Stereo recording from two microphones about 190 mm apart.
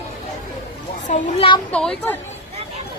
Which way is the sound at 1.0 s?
40° left (ahead or behind).